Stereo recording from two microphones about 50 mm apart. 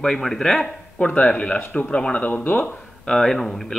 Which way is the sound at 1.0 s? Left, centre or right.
Left.